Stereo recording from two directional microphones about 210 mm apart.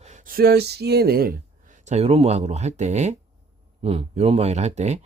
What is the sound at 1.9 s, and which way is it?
Speech, 30° right (ahead or behind).